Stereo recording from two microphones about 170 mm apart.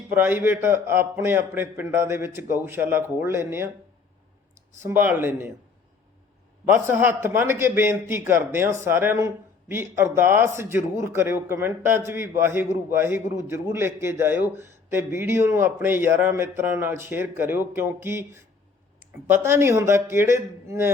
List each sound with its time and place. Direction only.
0.1 s a man's voice: 10° right (ahead or behind)
4.8 s a man's voice: 15° right (ahead or behind)
6.7 s a man's voice: 10° right (ahead or behind)